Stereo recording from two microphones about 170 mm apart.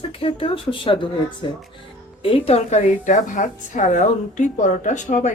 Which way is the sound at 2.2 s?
35° left (ahead or behind).